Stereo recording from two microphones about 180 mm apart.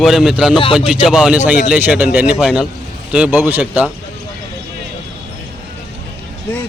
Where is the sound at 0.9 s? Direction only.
5° right (ahead or behind).